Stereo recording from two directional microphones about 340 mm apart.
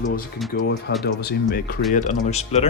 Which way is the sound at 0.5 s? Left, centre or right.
Left.